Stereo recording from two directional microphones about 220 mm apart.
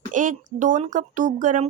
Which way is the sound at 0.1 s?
35° right (ahead or behind).